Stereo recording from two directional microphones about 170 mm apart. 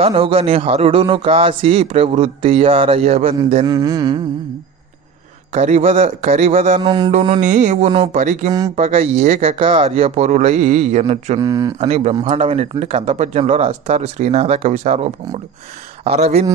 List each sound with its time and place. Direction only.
0.0 s a man's voice: 35° right (ahead or behind)
3.6 s speech: 20° right (ahead or behind)
5.5 s a man's voice: 40° right (ahead or behind)
6.8 s speech: 25° right (ahead or behind)
7.1 s mantra: 45° right (ahead or behind)
8.7 s a man's voice: 35° right (ahead or behind)
9.6 s a man's voice: 30° right (ahead or behind)
11.3 s speech: 20° right (ahead or behind)
11.8 s a man's voice: 40° right (ahead or behind)